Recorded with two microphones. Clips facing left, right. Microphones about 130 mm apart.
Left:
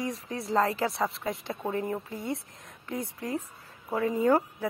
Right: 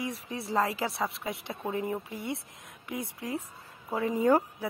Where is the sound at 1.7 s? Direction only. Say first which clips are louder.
Left 1 dB; 15° right (ahead or behind).